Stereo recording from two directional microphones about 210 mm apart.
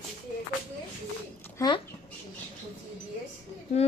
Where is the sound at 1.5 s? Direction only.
20° left (ahead or behind).